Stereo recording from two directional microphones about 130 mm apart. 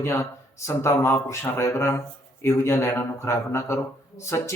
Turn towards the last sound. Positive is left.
turn(degrees=20)  # may be behind; listen again after turning